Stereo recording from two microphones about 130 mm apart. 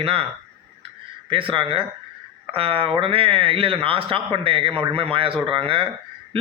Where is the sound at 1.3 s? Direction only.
40° right (ahead or behind).